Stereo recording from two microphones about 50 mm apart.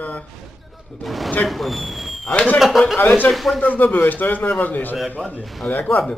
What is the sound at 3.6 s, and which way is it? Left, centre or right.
A man's voice, left.